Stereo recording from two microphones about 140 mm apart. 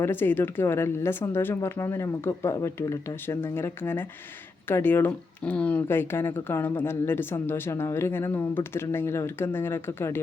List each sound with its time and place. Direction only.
0.0 s speech: 15° left (ahead or behind)